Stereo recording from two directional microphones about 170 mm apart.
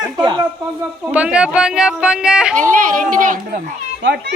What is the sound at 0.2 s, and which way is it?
Speech, 25° right (ahead or behind).